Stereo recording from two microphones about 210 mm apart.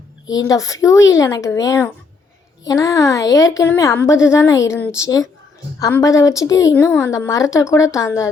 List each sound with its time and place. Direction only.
0.3 s a woman's voice: 15° left (ahead or behind)